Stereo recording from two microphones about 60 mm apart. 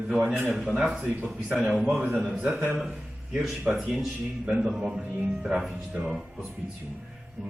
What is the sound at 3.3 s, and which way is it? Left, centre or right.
Speech, centre.